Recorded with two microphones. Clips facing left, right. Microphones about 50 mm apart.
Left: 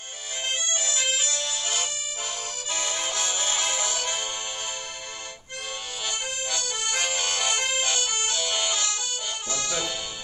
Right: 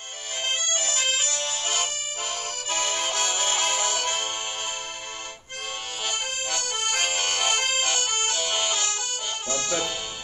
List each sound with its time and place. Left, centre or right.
0.4 s accordion: right
6.0 s accordion: right
9.5 s music: right